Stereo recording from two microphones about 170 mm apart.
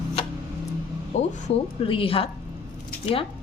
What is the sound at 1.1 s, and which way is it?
Speech, 40° left (ahead or behind).